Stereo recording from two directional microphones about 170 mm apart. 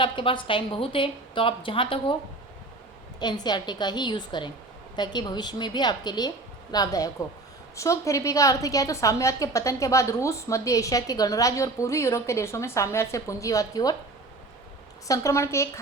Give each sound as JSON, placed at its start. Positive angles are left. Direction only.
{"t": 0.0, "sound": "a woman's voice", "side_deg": 30}
{"t": 3.2, "sound": "a woman's voice", "side_deg": 25}
{"t": 15.0, "sound": "a woman's voice", "side_deg": 20}